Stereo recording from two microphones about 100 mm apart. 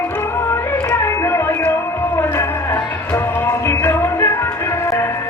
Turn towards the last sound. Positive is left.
turn(degrees=25)  # may be behind; listen again after turning